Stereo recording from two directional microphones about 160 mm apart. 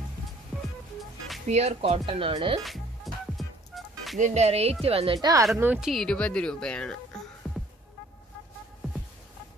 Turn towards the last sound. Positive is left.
turn(degrees=5)  # may be behind; listen again after turning